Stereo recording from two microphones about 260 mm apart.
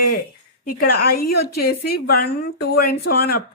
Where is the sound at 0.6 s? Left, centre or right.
Left.